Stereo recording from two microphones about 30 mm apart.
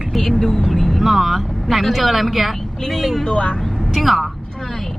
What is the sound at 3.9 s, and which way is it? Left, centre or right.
Speech, centre.